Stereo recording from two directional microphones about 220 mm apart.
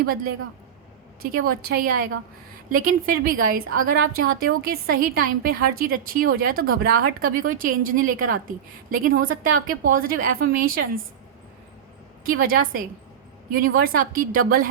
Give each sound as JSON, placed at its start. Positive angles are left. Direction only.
{"t": 1.2, "sound": "a woman's voice", "side_deg": -45}
{"t": 12.2, "sound": "a woman's voice", "side_deg": -40}